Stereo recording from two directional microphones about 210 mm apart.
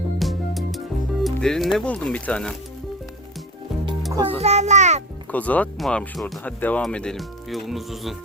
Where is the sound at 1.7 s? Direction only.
5° left (ahead or behind).